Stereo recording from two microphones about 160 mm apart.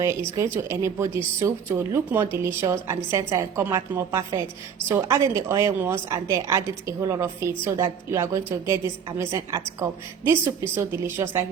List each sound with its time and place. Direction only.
0.0 s a woman's voice: 20° right (ahead or behind)